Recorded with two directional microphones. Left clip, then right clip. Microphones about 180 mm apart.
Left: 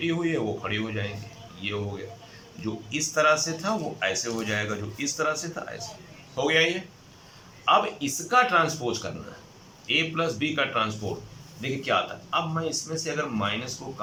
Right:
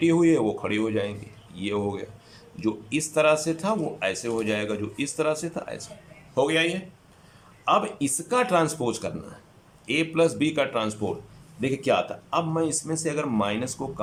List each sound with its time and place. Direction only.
0.0 s speech: 35° right (ahead or behind)